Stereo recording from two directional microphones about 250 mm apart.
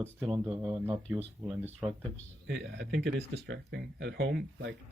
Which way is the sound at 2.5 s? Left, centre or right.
Right.